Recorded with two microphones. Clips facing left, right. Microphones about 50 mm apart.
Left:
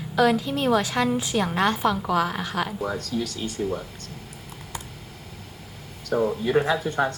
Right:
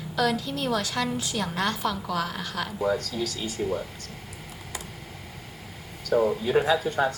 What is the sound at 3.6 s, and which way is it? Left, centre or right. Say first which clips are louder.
Speech: even; right.